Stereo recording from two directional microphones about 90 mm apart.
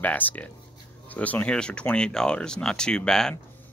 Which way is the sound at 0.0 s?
20° left (ahead or behind).